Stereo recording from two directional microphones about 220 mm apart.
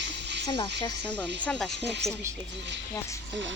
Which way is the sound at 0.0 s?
50° right (ahead or behind).